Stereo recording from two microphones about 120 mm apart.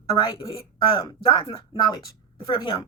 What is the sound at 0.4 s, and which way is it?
A man's voice, 55° left (ahead or behind).